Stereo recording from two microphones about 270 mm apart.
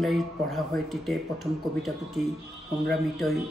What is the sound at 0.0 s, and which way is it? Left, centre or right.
A man's voice, centre.